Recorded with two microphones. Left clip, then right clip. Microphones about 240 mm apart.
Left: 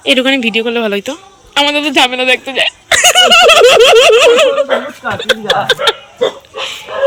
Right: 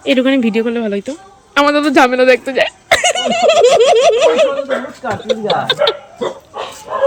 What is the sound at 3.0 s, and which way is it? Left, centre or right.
Speech, centre.